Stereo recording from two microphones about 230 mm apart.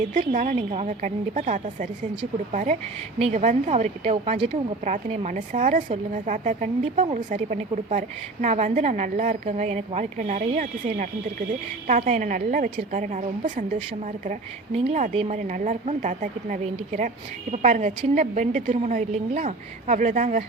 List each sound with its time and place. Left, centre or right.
0.1 s a woman's voice: right